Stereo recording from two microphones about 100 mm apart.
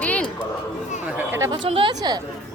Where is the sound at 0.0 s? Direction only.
15° left (ahead or behind).